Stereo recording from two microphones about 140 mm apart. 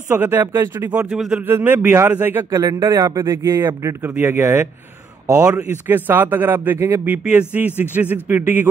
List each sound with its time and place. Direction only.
0.1 s speech: 15° right (ahead or behind)
1.1 s speech: 5° right (ahead or behind)
1.4 s speech: 15° right (ahead or behind)
2.6 s speech: 25° right (ahead or behind)
5.9 s speech: 15° right (ahead or behind)